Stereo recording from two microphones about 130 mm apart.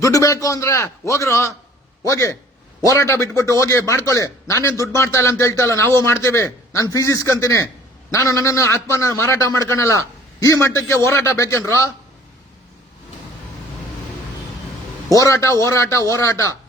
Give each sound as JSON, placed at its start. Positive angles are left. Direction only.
{"t": 0.0, "sound": "a man's voice", "side_deg": 25}
{"t": 15.1, "sound": "a man's voice", "side_deg": 25}